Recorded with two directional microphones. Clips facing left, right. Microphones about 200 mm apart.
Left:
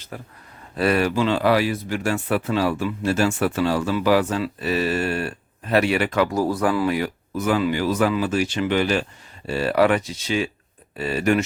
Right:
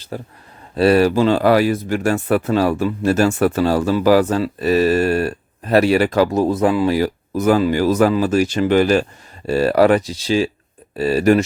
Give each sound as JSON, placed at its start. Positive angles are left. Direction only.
{"t": 0.1, "sound": "speech", "side_deg": -30}
{"t": 6.3, "sound": "speech", "side_deg": -20}